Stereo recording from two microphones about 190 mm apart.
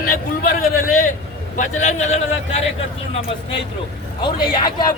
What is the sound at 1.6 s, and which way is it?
Speech, 40° left (ahead or behind).